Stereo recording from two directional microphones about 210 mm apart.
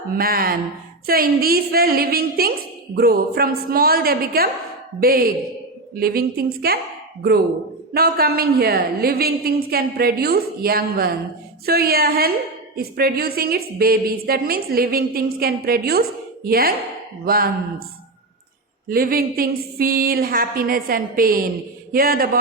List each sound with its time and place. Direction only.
0.1 s a woman's voice: 45° right (ahead or behind)
7.9 s a woman's voice: 45° right (ahead or behind)
18.9 s a woman's voice: 45° right (ahead or behind)